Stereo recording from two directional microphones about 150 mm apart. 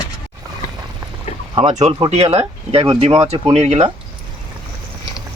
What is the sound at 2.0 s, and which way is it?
Speech, 45° right (ahead or behind).